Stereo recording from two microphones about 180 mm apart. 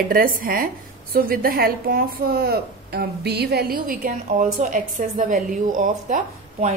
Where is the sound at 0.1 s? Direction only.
55° right (ahead or behind).